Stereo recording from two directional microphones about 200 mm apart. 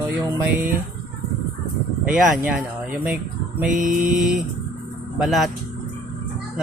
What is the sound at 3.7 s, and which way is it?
Mantra, 40° right (ahead or behind).